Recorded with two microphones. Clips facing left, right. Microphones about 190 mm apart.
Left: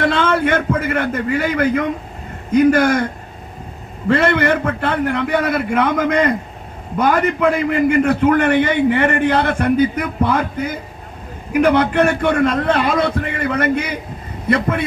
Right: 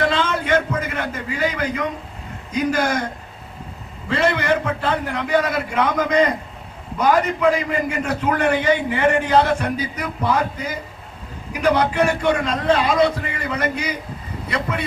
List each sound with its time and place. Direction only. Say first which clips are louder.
0.1 s a man's voice: left 3 dB; 55° left (ahead or behind)
4.1 s a man's voice: left 4 dB; 55° left (ahead or behind)